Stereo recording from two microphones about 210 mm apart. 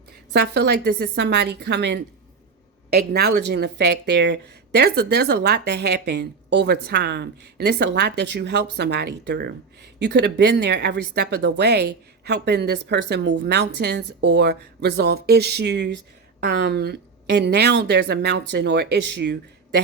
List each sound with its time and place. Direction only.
0.3 s speech: 50° right (ahead or behind)